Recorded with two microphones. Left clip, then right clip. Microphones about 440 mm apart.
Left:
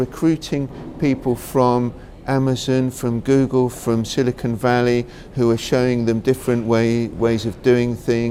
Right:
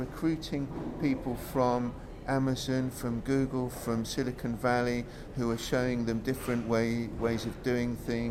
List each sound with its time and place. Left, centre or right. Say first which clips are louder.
0.2 s speech: left 10 dB; left